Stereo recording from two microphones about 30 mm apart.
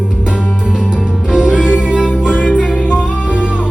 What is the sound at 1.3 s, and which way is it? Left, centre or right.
Music, right.